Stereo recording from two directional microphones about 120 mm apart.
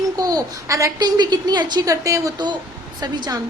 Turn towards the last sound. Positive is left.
turn(degrees=-35)  # may be behind; listen again after turning